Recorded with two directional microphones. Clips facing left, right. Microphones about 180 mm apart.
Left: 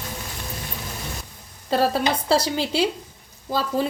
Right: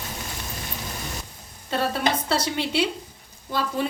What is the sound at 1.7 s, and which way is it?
A woman's voice, 35° left (ahead or behind).